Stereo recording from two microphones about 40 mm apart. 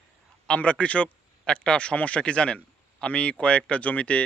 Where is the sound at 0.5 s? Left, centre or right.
Left.